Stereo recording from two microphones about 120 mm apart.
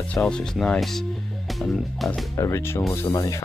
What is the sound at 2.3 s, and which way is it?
Speech, 25° left (ahead or behind).